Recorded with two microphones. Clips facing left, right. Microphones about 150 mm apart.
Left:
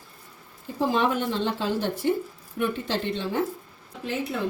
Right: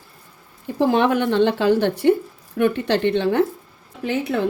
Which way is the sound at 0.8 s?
65° right (ahead or behind).